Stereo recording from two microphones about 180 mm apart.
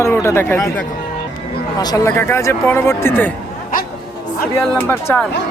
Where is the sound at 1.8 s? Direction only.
20° left (ahead or behind).